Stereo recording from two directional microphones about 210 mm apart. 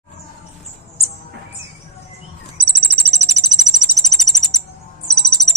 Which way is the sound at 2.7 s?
25° right (ahead or behind).